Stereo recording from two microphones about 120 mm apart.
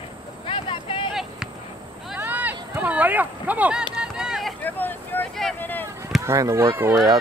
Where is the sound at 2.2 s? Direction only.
15° right (ahead or behind).